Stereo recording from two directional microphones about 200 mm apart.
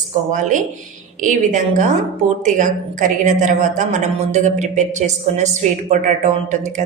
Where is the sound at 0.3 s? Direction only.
40° right (ahead or behind).